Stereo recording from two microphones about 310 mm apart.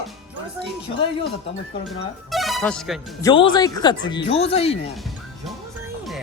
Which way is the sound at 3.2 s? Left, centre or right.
Centre.